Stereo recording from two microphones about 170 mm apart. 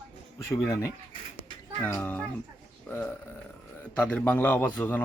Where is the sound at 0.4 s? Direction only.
20° left (ahead or behind).